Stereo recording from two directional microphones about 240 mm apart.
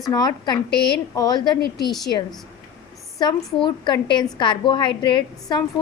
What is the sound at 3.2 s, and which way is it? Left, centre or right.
A woman's voice, centre.